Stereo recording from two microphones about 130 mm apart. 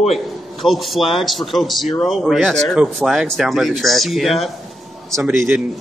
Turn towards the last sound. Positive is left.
turn(degrees=-15)  # may be behind; listen again after turning